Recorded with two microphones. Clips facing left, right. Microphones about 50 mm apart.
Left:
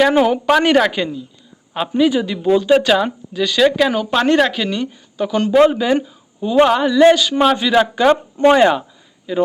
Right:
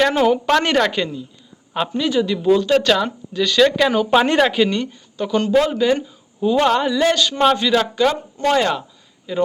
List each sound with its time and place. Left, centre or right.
0.0 s a woman's voice: centre
9.3 s a woman's voice: centre